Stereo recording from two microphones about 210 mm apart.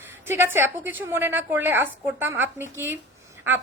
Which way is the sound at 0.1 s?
10° right (ahead or behind).